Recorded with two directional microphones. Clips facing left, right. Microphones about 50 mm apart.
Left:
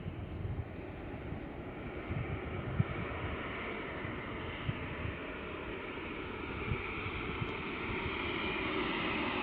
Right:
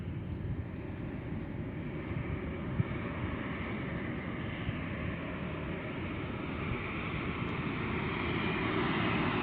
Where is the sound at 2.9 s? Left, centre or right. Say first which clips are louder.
Right 2 dB; centre.